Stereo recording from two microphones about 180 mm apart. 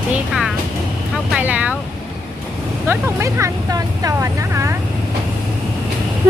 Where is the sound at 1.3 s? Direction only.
10° right (ahead or behind).